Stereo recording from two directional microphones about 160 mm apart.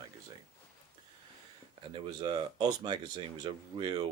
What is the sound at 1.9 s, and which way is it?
Speech, 30° right (ahead or behind).